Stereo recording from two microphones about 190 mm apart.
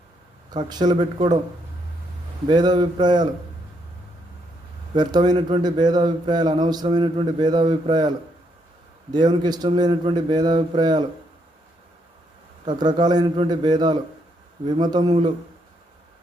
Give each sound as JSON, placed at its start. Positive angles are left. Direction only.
{"t": 0.5, "sound": "speech", "side_deg": -20}
{"t": 2.5, "sound": "speech", "side_deg": -20}
{"t": 4.9, "sound": "speech", "side_deg": -20}
{"t": 9.1, "sound": "speech", "side_deg": -25}
{"t": 12.6, "sound": "speech", "side_deg": -20}